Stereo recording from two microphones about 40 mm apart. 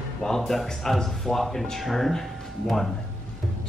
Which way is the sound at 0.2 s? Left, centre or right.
Centre.